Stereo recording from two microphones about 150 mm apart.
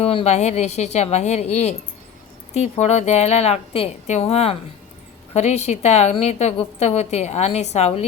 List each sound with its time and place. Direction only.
0.0 s a woman's voice: 40° left (ahead or behind)